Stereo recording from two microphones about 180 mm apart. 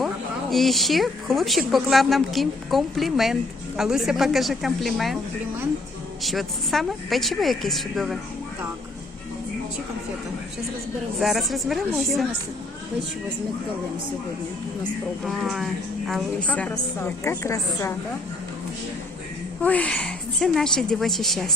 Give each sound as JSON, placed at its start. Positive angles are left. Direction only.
{"t": 0.5, "sound": "speech", "side_deg": 0}
{"t": 6.2, "sound": "speech", "side_deg": 0}
{"t": 11.2, "sound": "speech", "side_deg": 0}
{"t": 15.2, "sound": "a woman's voice", "side_deg": 0}
{"t": 19.6, "sound": "speech", "side_deg": 10}